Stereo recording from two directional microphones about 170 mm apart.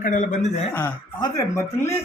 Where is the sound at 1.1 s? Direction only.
25° left (ahead or behind).